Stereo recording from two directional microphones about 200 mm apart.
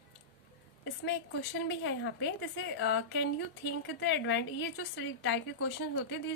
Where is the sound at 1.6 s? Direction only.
65° left (ahead or behind).